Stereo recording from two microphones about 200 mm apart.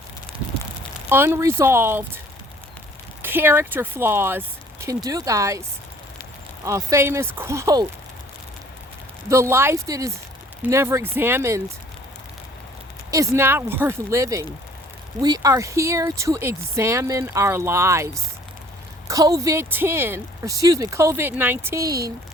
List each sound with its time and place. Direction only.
1.1 s speech: 10° right (ahead or behind)
3.2 s speech: 10° right (ahead or behind)
6.7 s speech: 15° right (ahead or behind)
9.3 s speech: 15° right (ahead or behind)
13.1 s a woman's voice: 15° right (ahead or behind)